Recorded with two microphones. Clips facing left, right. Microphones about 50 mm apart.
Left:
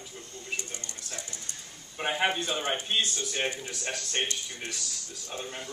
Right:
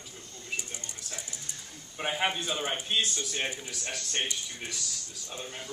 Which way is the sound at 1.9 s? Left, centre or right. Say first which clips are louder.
Left 2 dB; centre.